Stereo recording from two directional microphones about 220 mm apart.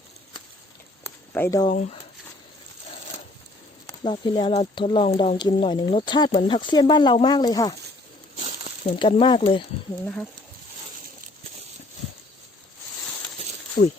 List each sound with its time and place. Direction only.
1.0 s a sound: 10° left (ahead or behind)
1.7 s speech: 35° left (ahead or behind)
3.8 s speech: 20° left (ahead or behind)
9.0 s speech: 20° left (ahead or behind)
13.8 s speech: 50° left (ahead or behind)